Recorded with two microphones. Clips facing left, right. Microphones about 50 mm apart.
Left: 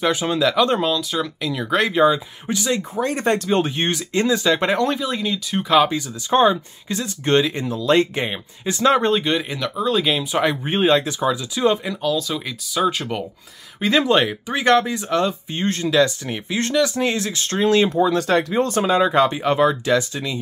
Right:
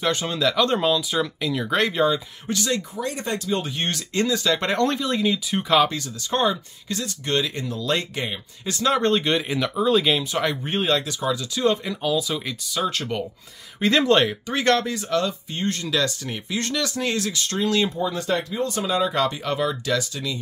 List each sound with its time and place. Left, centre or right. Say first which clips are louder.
0.0 s speech: left 4 dB; centre
3.0 s speech: left 7 dB; left
3.9 s speech: left 2 dB; left
4.7 s speech: left 1 dB; centre
5.9 s speech: left 5 dB; centre
9.0 s speech: left 1 dB; centre
10.3 s speech: left 4 dB; centre
12.0 s speech: left 2 dB; centre
12.8 s speech: left 4 dB; centre; by 17.9 s left
17.9 s speech: left 7 dB; left
18.7 s speech: left 3 dB; left